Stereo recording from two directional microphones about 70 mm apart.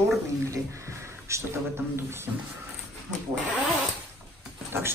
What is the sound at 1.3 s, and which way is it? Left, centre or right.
Speech, right.